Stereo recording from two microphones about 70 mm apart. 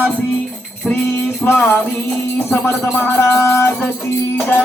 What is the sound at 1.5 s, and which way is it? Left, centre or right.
Music, left.